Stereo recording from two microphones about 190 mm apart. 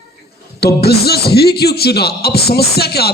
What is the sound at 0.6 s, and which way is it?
A man's voice, 55° left (ahead or behind).